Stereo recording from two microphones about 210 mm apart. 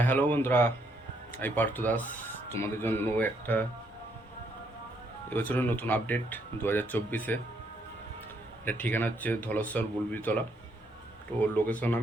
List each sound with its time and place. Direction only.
0.0 s speech: 10° left (ahead or behind)
5.3 s speech: 10° left (ahead or behind)
8.6 s speech: 10° left (ahead or behind)